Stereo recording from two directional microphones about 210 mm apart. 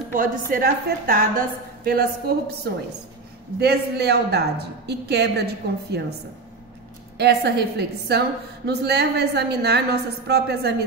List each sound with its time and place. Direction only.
0.1 s a woman's voice: 40° right (ahead or behind)
7.2 s a woman's voice: 50° right (ahead or behind)